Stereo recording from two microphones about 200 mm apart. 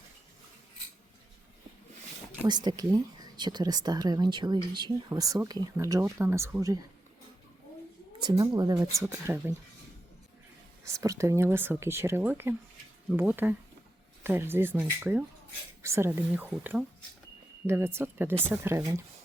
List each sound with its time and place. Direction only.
2.5 s speech: 20° right (ahead or behind)
8.2 s speech: 20° right (ahead or behind)
10.8 s speech: 15° right (ahead or behind)